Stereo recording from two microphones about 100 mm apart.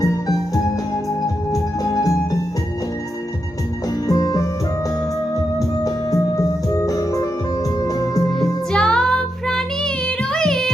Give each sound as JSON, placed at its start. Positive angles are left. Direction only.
{"t": 0.0, "sound": "music", "side_deg": 35}
{"t": 1.8, "sound": "music", "side_deg": 40}
{"t": 4.1, "sound": "music", "side_deg": 40}
{"t": 5.5, "sound": "music", "side_deg": 35}
{"t": 8.4, "sound": "music", "side_deg": 10}
{"t": 10.3, "sound": "child singing", "side_deg": 5}